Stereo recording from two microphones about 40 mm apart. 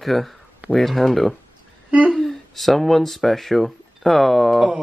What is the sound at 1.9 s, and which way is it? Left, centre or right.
Speech, right.